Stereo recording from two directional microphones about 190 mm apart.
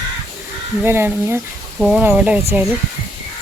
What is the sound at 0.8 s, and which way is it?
Speech, 10° right (ahead or behind).